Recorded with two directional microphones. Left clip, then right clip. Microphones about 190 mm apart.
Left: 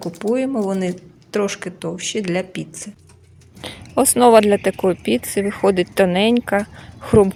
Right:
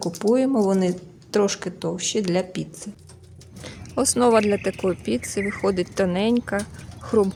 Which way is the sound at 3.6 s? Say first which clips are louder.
Left 6 dB; 20° left (ahead or behind).